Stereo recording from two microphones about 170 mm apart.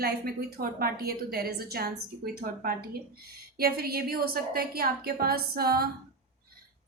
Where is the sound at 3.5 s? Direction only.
65° right (ahead or behind).